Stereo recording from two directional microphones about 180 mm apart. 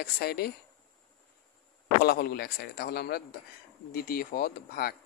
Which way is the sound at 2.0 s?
60° left (ahead or behind).